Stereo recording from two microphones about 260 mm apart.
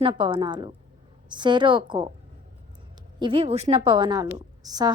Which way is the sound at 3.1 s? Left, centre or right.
Centre.